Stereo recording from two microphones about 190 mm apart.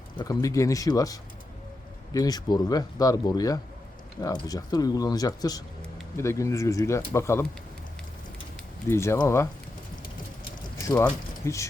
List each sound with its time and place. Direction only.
0.2 s speech: 20° left (ahead or behind)
8.9 s speech: 15° left (ahead or behind)
10.8 s speech: 15° left (ahead or behind)